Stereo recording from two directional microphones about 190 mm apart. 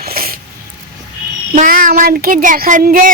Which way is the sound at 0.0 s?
50° right (ahead or behind).